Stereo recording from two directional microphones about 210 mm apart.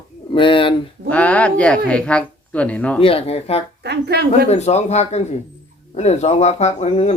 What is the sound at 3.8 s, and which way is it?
Speech, 50° right (ahead or behind).